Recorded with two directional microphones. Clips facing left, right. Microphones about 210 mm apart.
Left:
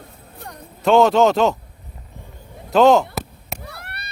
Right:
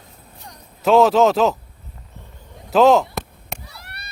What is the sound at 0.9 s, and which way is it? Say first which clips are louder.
Speech: even; centre (ahead or behind).